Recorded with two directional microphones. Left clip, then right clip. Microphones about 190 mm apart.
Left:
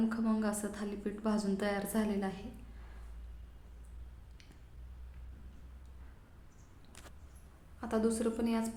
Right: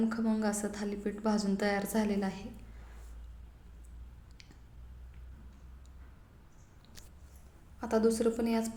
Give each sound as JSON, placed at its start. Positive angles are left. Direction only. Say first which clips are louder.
{"t": 0.1, "sound": "a woman's voice", "louder": "right 2 dB", "side_deg": -10}
{"t": 7.8, "sound": "a woman's voice", "louder": "right 5 dB", "side_deg": -15}